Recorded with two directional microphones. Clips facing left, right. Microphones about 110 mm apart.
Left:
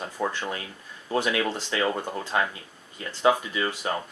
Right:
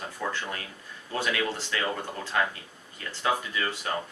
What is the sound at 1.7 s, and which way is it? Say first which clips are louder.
Speech: left 8 dB; 25° left (ahead or behind).